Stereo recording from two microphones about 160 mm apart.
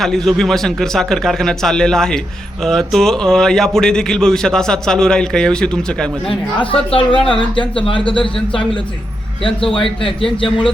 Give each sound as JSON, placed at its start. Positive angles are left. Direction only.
{"t": 0.0, "sound": "a man's voice", "side_deg": 0}
{"t": 6.6, "sound": "a woman's voice", "side_deg": 35}